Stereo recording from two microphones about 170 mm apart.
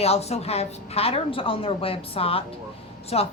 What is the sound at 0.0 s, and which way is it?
A woman's voice, 40° left (ahead or behind).